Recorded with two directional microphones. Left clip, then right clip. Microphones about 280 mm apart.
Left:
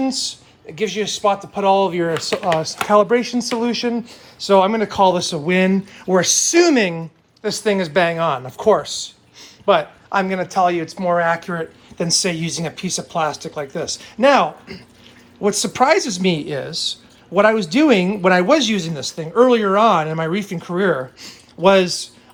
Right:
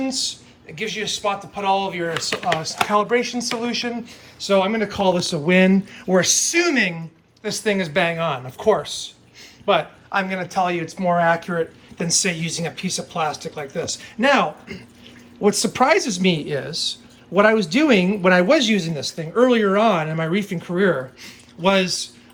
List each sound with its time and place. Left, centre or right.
0.0 s speech: centre